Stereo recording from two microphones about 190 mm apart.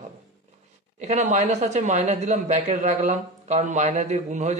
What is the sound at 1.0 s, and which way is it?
Speech, 40° right (ahead or behind).